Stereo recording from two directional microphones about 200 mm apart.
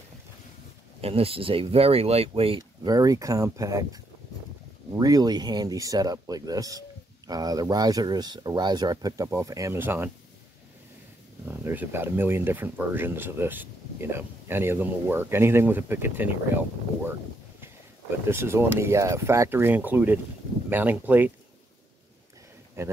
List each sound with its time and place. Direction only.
1.0 s speech: 30° right (ahead or behind); by 10.1 s 10° right (ahead or behind)
11.4 s speech: 10° right (ahead or behind)
18.3 s speech: 10° right (ahead or behind)
22.8 s speech: 15° right (ahead or behind)